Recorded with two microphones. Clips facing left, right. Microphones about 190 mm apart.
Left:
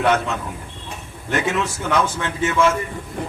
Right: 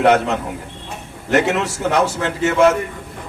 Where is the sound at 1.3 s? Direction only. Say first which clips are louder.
Right 6 dB; 70° right (ahead or behind).